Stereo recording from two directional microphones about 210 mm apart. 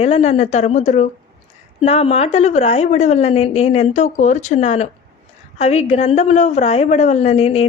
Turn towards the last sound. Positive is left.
turn(degrees=30)  # may be behind; listen again after turning